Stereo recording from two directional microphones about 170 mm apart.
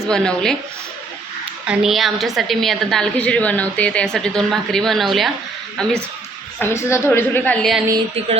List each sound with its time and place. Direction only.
0.1 s a woman's voice: 5° left (ahead or behind)
1.6 s a woman's voice: 5° right (ahead or behind)
6.6 s a woman's voice: 15° left (ahead or behind)